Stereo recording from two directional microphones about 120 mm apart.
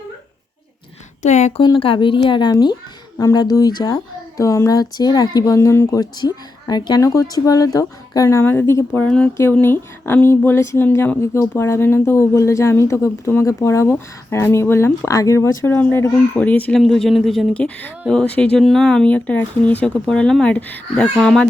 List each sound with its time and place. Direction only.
1.2 s speech: 70° left (ahead or behind)
1.8 s speech: 45° left (ahead or behind); by 8.8 s 20° left (ahead or behind)
9.0 s a woman's voice: 10° left (ahead or behind)
16.8 s speech: centre (ahead or behind)